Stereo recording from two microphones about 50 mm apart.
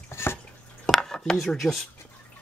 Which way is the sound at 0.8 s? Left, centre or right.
Centre.